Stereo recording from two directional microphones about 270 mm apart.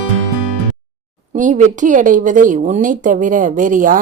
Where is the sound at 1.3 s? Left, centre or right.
Right.